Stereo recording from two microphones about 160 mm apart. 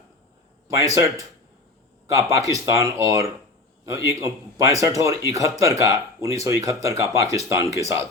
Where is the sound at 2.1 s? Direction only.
20° right (ahead or behind).